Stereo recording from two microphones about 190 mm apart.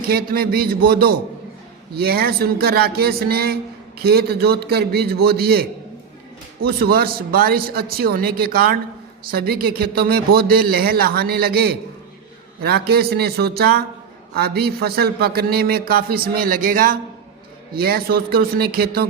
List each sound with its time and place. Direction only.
0.1 s a man's voice: 50° right (ahead or behind)
6.7 s a man's voice: 55° right (ahead or behind)